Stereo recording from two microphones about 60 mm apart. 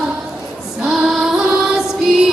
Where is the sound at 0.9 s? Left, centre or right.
Centre.